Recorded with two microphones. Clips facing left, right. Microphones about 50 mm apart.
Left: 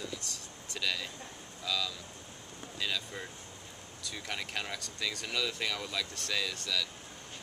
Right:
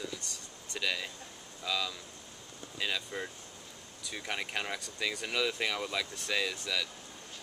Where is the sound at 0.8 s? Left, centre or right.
Centre.